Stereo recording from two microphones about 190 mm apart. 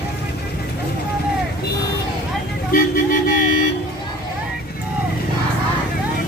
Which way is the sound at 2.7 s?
45° left (ahead or behind).